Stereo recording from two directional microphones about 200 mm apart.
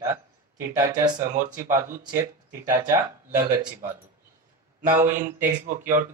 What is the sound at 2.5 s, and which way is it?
Speech, 15° right (ahead or behind).